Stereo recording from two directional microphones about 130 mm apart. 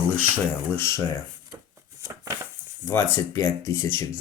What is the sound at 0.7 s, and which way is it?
Speech, 20° left (ahead or behind).